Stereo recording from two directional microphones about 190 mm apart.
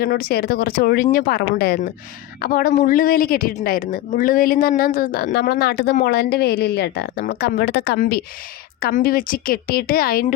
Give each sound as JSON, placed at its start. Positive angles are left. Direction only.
{"t": 0.0, "sound": "a woman's voice", "side_deg": 50}